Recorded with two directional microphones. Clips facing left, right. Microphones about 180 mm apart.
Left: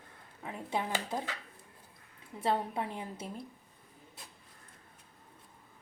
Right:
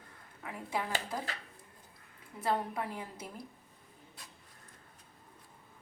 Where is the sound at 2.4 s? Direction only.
25° left (ahead or behind).